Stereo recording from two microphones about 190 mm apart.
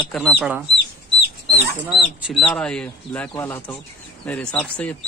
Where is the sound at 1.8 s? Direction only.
5° right (ahead or behind).